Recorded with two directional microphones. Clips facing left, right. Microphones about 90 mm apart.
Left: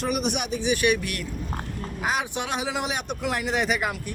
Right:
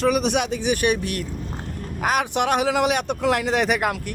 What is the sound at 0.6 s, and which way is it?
Speech, 45° right (ahead or behind).